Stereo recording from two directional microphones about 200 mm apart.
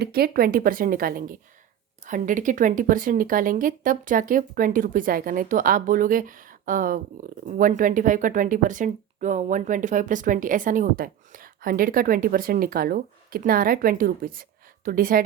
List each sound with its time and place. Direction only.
0.0 s a woman's voice: 50° right (ahead or behind)